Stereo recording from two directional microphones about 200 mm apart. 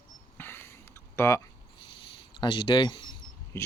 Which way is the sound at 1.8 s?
25° left (ahead or behind).